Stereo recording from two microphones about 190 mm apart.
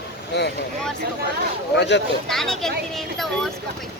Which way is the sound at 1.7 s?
65° left (ahead or behind).